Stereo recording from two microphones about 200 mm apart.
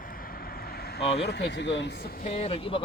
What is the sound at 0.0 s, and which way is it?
Vehicle, 45° left (ahead or behind).